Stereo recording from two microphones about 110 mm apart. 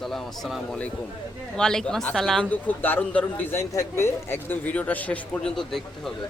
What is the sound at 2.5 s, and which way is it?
Speech, 15° left (ahead or behind).